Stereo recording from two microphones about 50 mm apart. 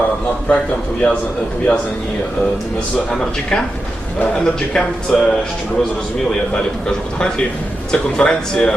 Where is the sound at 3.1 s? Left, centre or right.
Centre.